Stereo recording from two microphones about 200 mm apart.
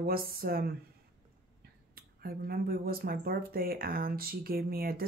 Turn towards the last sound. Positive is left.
turn(degrees=-50)  # may be behind; listen again after turning